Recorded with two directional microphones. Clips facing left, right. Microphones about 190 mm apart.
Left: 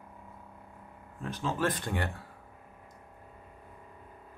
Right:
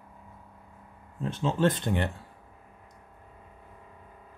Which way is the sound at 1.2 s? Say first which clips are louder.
Right 6 dB; 25° right (ahead or behind).